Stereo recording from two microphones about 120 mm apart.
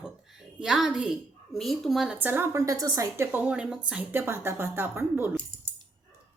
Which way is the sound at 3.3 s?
10° right (ahead or behind).